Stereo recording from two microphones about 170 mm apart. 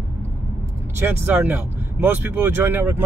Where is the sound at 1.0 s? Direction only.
10° right (ahead or behind).